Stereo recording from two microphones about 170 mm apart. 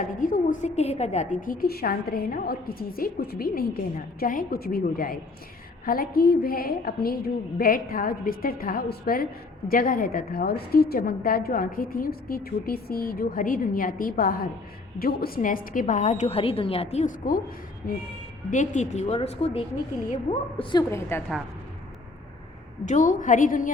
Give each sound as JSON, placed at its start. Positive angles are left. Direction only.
{"t": 0.0, "sound": "a woman's voice", "side_deg": 50}
{"t": 21.1, "sound": "a woman's voice", "side_deg": 15}
{"t": 22.9, "sound": "a woman's voice", "side_deg": 50}